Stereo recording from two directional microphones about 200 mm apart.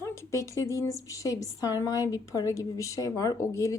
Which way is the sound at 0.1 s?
15° left (ahead or behind).